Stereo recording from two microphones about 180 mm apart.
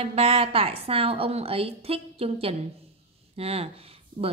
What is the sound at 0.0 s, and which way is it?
Speech, 35° right (ahead or behind).